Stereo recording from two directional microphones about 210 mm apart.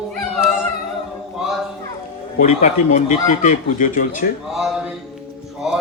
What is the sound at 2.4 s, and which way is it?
Speech, 35° left (ahead or behind).